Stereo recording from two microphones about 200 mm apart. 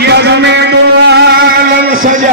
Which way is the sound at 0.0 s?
55° right (ahead or behind).